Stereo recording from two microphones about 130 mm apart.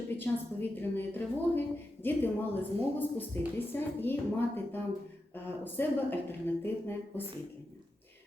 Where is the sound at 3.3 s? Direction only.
15° left (ahead or behind).